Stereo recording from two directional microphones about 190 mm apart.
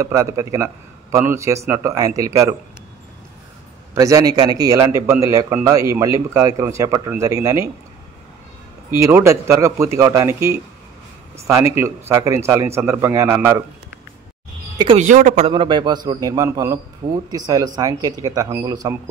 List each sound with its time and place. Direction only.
0.0 s speech: 15° right (ahead or behind)
3.9 s a man's voice: 15° right (ahead or behind)
8.9 s speech: 15° right (ahead or behind)
15.0 s a man's voice: 40° right (ahead or behind); by 18.9 s 20° right (ahead or behind)